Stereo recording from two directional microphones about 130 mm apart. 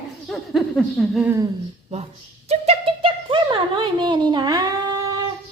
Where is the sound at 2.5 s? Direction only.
45° right (ahead or behind); by 5.2 s 30° right (ahead or behind).